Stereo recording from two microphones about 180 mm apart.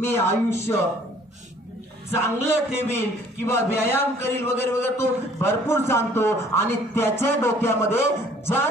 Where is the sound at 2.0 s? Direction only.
15° left (ahead or behind).